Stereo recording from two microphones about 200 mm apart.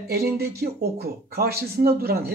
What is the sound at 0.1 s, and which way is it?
Speech, 55° right (ahead or behind).